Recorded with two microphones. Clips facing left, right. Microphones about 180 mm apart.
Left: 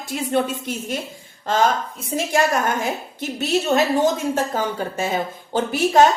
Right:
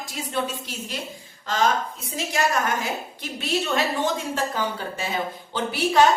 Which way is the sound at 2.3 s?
50° left (ahead or behind).